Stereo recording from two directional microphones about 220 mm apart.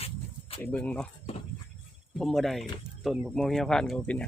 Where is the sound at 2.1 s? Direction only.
Centre (ahead or behind).